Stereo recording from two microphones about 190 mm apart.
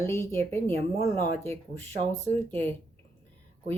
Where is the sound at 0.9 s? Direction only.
50° left (ahead or behind).